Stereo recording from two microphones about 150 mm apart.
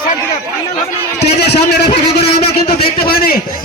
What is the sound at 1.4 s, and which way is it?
Speech, 90° left.